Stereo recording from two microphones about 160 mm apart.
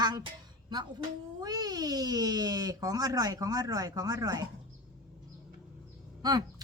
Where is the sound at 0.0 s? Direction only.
25° right (ahead or behind).